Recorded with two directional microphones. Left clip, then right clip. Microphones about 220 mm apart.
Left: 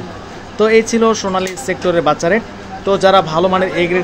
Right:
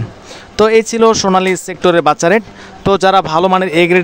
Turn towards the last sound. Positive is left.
turn(degrees=-50)  # may be behind; listen again after turning